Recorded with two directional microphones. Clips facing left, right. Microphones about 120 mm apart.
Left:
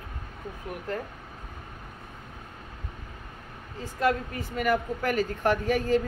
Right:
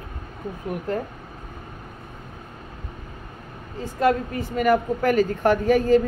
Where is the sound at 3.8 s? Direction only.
25° right (ahead or behind).